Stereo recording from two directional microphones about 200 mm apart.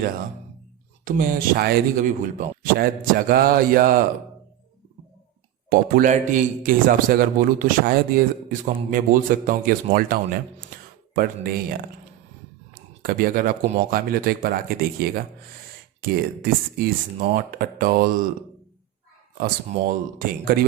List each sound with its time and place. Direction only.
1.0 s a man's voice: 45° right (ahead or behind)
5.6 s a man's voice: 40° right (ahead or behind)
13.0 s a man's voice: 45° right (ahead or behind)
20.1 s a man's voice: 45° right (ahead or behind)